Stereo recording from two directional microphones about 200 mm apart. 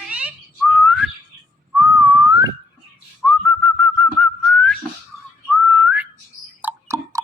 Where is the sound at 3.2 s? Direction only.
5° left (ahead or behind).